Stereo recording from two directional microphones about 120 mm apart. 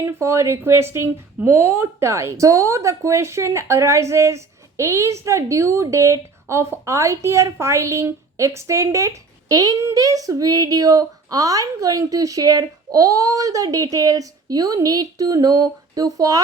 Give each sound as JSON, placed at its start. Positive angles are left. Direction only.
{"t": 0.0, "sound": "speech", "side_deg": -25}